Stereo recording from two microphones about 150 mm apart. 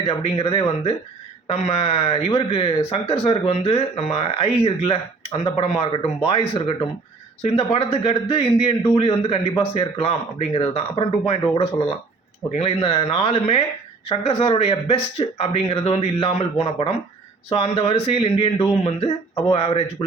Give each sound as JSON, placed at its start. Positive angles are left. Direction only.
{"t": 0.0, "sound": "a man's voice", "side_deg": 40}